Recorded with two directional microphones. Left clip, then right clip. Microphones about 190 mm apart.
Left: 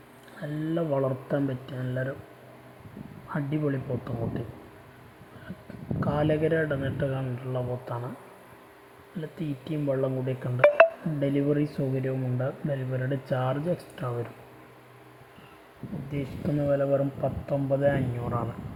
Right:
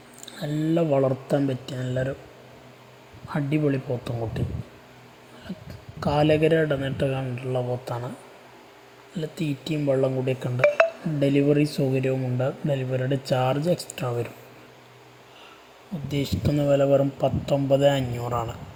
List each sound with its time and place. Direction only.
0.4 s speech: 30° right (ahead or behind)
3.2 s speech: 25° right (ahead or behind)
6.0 s speech: 25° right (ahead or behind)
9.1 s speech: 25° right (ahead or behind)
16.0 s speech: 50° right (ahead or behind); by 17.3 s 30° right (ahead or behind)
17.4 s speech: 45° right (ahead or behind)